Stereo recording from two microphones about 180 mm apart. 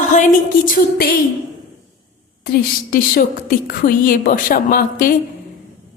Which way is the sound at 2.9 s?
55° left (ahead or behind).